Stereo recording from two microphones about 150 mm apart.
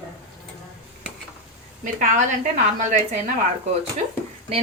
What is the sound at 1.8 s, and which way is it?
A woman's voice, 60° right (ahead or behind).